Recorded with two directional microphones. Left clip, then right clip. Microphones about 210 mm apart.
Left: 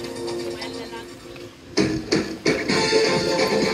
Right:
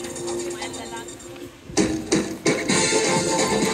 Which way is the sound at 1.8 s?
25° right (ahead or behind).